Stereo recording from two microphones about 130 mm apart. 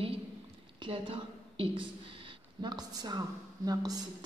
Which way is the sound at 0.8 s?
45° right (ahead or behind).